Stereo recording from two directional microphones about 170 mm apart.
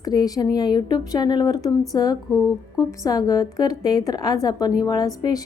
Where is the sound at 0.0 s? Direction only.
20° left (ahead or behind).